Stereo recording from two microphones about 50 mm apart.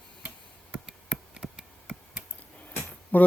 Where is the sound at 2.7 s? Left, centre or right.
Left.